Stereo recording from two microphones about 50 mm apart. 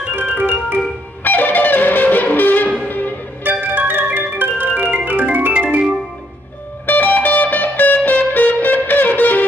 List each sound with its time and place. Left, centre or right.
0.3 s organ: right
0.7 s music: left
3.4 s organ: right
5.5 s organ: right
6.9 s music: left